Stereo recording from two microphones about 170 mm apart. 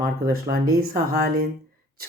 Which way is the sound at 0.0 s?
65° right (ahead or behind).